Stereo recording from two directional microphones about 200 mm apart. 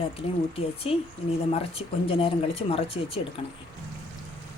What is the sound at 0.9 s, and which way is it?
Speech, 30° left (ahead or behind).